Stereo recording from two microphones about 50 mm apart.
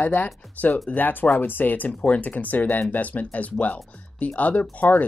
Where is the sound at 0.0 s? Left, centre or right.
Left.